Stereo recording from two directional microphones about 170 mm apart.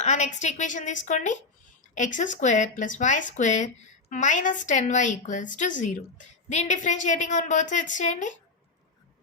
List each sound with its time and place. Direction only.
0.0 s a woman's voice: 45° left (ahead or behind)